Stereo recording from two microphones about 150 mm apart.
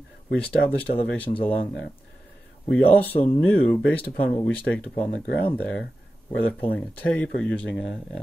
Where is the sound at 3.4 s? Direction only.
10° left (ahead or behind).